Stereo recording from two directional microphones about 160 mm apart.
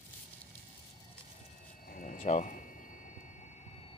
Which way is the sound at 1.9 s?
55° left (ahead or behind).